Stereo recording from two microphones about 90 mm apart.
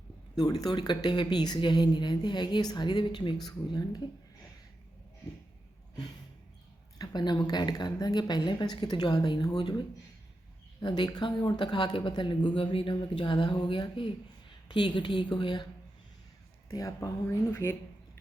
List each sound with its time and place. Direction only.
0.3 s a woman's voice: 45° left (ahead or behind)
7.0 s a woman's voice: 55° left (ahead or behind)
12.5 s speech: 85° left; by 15.6 s 60° left (ahead or behind)
16.6 s speech: 40° left (ahead or behind)
17.2 s speech: 25° left (ahead or behind)